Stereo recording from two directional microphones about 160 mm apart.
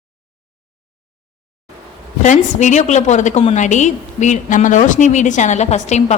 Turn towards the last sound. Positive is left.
turn(degrees=45)  # may be behind; listen again after turning